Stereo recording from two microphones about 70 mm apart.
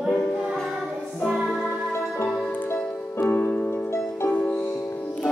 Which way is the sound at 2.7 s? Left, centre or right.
Left.